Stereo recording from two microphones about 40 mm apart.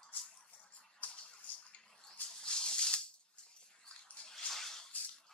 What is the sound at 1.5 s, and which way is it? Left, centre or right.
Bathtub, left.